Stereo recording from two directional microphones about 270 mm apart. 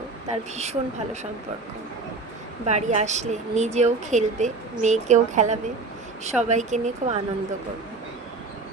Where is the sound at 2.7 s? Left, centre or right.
Right.